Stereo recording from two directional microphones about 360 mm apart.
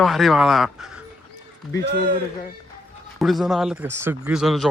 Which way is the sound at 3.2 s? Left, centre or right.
Centre.